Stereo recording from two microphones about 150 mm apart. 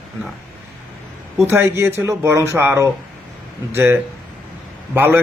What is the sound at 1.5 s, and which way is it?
A man's voice, 15° right (ahead or behind).